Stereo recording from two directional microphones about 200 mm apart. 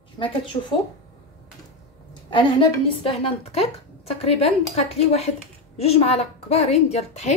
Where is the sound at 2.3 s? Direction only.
25° left (ahead or behind).